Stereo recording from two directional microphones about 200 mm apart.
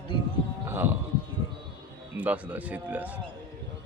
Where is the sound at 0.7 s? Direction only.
10° right (ahead or behind).